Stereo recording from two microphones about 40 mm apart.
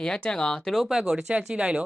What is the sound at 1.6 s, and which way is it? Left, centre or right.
Speech, right.